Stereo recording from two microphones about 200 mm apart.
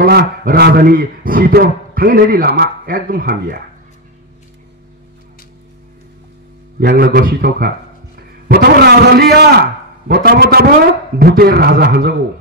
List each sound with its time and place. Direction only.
0.0 s a man's voice: 50° right (ahead or behind)
6.8 s a man's voice: 50° right (ahead or behind)